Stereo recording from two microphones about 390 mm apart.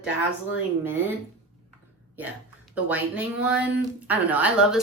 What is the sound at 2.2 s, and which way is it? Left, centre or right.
Speech, centre.